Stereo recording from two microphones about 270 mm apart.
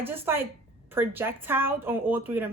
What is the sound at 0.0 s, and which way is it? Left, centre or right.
A woman's voice, centre.